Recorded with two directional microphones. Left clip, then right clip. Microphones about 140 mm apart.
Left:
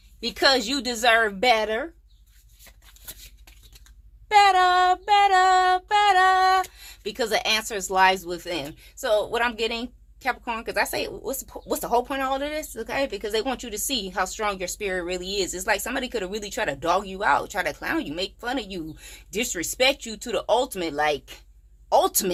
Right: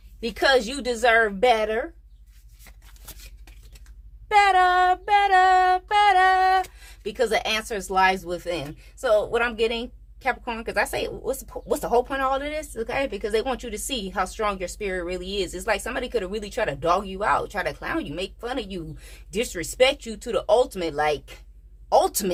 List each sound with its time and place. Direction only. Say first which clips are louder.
0.2 s child singing: right 1 dB; 30° left (ahead or behind)
4.3 s child singing: even; 25° left (ahead or behind); by 21.3 s 40° left (ahead or behind)
21.8 s a woman's voice: right 1 dB; 35° left (ahead or behind)